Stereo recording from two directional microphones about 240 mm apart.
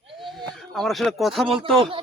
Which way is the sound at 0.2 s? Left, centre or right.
Centre.